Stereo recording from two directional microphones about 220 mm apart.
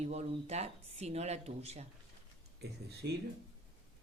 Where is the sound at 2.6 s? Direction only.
45° right (ahead or behind).